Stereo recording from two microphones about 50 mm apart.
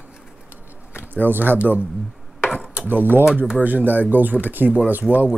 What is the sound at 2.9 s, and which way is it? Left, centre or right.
Speech, right.